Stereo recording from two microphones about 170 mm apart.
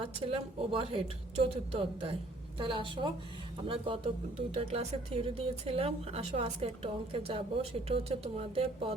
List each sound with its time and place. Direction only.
0.2 s speech: 30° right (ahead or behind)